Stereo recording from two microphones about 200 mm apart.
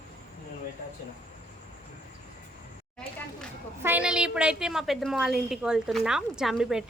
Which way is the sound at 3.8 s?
5° right (ahead or behind).